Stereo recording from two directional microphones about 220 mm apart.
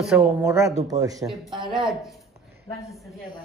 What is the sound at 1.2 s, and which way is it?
Speech, centre (ahead or behind).